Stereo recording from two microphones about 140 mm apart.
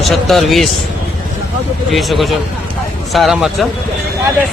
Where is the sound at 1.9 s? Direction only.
Centre (ahead or behind).